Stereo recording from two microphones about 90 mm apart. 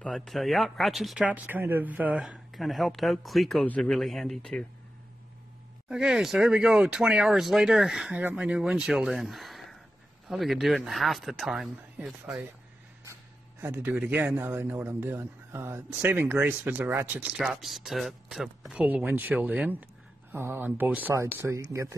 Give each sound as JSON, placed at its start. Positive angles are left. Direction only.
{"t": 0.1, "sound": "speech", "side_deg": 0}
{"t": 1.1, "sound": "speech", "side_deg": -15}
{"t": 2.5, "sound": "speech", "side_deg": 0}
{"t": 3.6, "sound": "speech", "side_deg": 10}
{"t": 5.9, "sound": "speech", "side_deg": -10}
{"t": 8.2, "sound": "speech", "side_deg": -20}
{"t": 13.0, "sound": "speech", "side_deg": -30}
{"t": 17.4, "sound": "speech", "side_deg": -5}
{"t": 18.7, "sound": "speech", "side_deg": -10}